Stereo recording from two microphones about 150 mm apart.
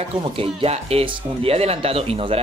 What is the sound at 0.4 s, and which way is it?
Speech, 40° right (ahead or behind).